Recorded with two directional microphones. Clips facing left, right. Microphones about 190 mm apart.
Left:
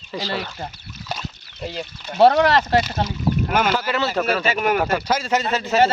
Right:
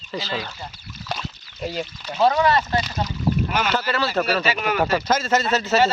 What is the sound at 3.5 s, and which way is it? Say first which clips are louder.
Speech: left 4 dB; 50° left (ahead or behind).